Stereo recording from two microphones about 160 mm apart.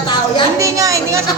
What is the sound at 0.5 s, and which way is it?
Speech, 20° right (ahead or behind).